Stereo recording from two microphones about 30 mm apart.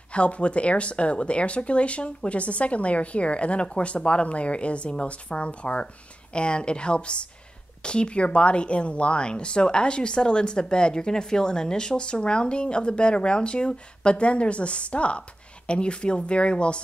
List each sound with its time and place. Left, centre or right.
0.1 s speech: left
6.3 s speech: left